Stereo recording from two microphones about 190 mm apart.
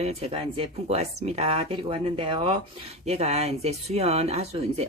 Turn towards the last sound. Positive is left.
turn(degrees=-35)  # may be behind; listen again after turning